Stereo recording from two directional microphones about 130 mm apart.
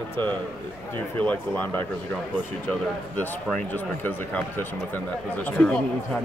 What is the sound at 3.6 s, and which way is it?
Speech, 15° left (ahead or behind).